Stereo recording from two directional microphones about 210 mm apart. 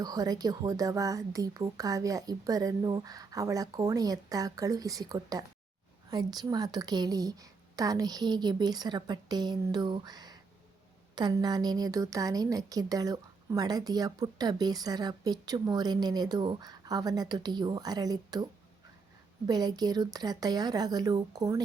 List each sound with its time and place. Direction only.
0.0 s a woman's voice: 15° right (ahead or behind)
19.5 s a woman's voice: 20° right (ahead or behind)